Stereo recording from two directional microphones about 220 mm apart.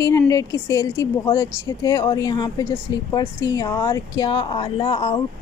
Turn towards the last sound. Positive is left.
turn(degrees=20)  # may be behind; listen again after turning